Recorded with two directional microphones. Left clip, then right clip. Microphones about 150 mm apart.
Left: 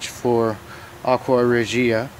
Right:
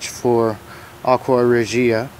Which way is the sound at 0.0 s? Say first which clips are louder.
Right 3 dB; 5° right (ahead or behind).